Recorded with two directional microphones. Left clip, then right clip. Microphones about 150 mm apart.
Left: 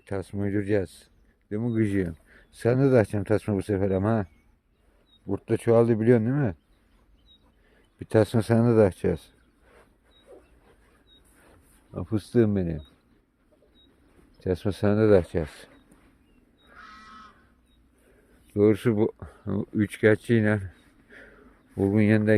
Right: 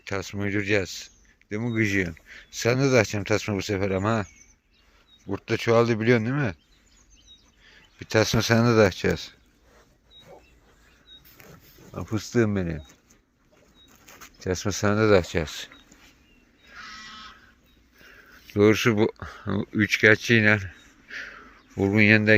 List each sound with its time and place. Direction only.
0.1 s speech: 40° left (ahead or behind)
5.3 s speech: 50° left (ahead or behind)
7.6 s speech: 50° left (ahead or behind); by 9.3 s 25° left (ahead or behind)
11.9 s speech: 50° left (ahead or behind)
14.3 s speech: 45° left (ahead or behind)
16.7 s crow: 70° left (ahead or behind)
18.4 s a sound: 10° left (ahead or behind)
18.7 s speech: 20° left (ahead or behind)